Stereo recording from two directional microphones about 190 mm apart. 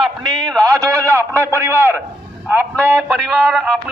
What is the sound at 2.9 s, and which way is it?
Music, 5° left (ahead or behind).